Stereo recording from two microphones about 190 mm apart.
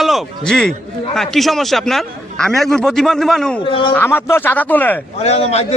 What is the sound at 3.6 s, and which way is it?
Speech, 25° left (ahead or behind).